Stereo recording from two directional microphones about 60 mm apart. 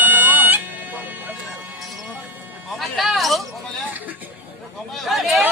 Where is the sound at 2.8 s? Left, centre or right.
Centre.